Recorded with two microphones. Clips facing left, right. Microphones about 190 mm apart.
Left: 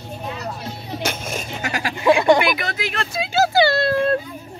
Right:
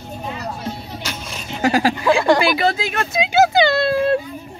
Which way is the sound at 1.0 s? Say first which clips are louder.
Left 4 dB; 50° left (ahead or behind).